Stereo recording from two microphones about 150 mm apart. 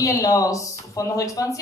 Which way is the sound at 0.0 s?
20° left (ahead or behind).